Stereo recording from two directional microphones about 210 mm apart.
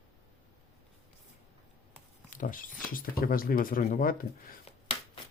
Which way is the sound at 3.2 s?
45° left (ahead or behind).